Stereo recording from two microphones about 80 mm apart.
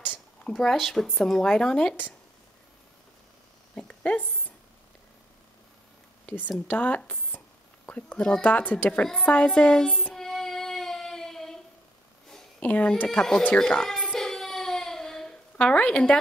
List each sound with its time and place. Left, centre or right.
0.5 s speech: centre
3.7 s a sound: centre
6.2 s speech: centre
7.1 s a sound: centre
8.3 s speech: centre
10.0 s child singing: centre
12.5 s speech: centre
13.6 s baby cry: centre
15.5 s speech: centre